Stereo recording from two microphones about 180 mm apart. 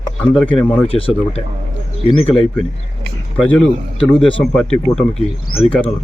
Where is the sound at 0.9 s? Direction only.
30° left (ahead or behind).